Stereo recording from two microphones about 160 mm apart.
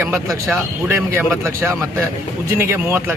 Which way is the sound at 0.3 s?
Centre (ahead or behind).